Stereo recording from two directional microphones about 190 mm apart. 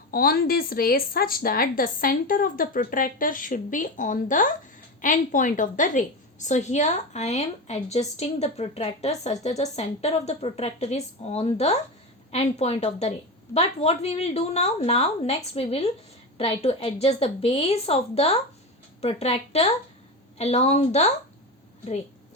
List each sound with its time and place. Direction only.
0.1 s a woman's voice: 50° left (ahead or behind); by 21.1 s 35° left (ahead or behind)